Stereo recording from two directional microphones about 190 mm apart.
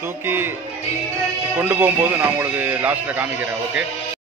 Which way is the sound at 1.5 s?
10° right (ahead or behind).